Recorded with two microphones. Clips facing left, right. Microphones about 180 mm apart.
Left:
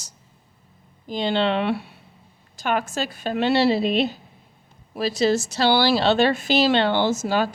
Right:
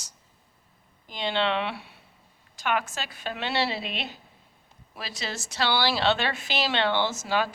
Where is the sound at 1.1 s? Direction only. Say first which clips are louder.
Left 5 dB; 40° left (ahead or behind).